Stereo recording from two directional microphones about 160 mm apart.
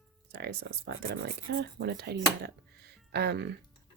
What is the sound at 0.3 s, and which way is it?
Speech, 90° right.